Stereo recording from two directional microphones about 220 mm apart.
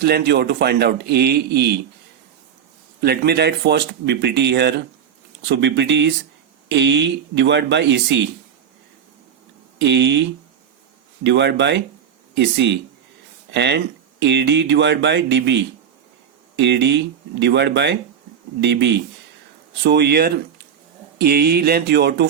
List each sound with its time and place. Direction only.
0.0 s speech: 50° right (ahead or behind)
3.0 s speech: 45° right (ahead or behind)
9.7 s speech: 50° right (ahead or behind)